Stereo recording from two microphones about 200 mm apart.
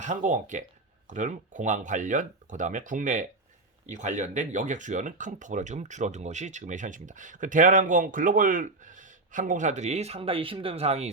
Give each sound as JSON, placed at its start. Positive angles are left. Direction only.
{"t": 0.0, "sound": "speech", "side_deg": -40}